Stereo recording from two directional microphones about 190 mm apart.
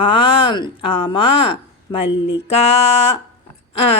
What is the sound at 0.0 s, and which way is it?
A woman's voice, 30° left (ahead or behind).